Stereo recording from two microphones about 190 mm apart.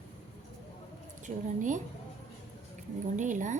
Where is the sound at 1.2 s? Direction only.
40° right (ahead or behind).